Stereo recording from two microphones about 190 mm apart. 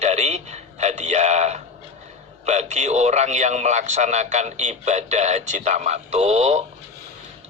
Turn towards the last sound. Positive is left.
turn(degrees=-35)  # may be behind; listen again after turning